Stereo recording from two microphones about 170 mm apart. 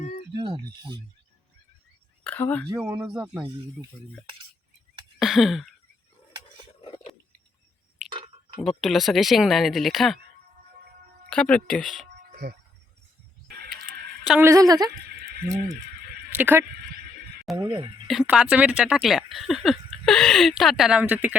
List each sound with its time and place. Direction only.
0.3 s speech: 25° right (ahead or behind)
2.2 s speech: 10° left (ahead or behind)
2.6 s a woman's voice: 20° right (ahead or behind)
5.2 s a sound: centre (ahead or behind)
6.8 s a sound: 30° left (ahead or behind)
8.8 s speech: centre (ahead or behind)
11.3 s speech: 5° left (ahead or behind)
12.3 s doorbell: 60° right (ahead or behind)
14.3 s a woman's voice: 10° right (ahead or behind)
14.5 s a woman's voice: 20° right (ahead or behind)
16.4 s a woman's voice: 10° right (ahead or behind)
17.6 s a woman's voice: 25° right (ahead or behind)
18.1 s speech: 5° right (ahead or behind)